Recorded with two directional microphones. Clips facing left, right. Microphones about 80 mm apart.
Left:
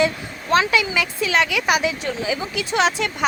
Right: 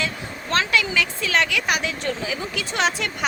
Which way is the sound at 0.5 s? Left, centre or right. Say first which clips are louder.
Left 3 dB; centre.